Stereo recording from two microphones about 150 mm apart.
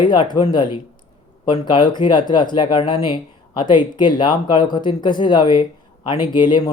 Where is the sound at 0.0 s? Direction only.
30° left (ahead or behind).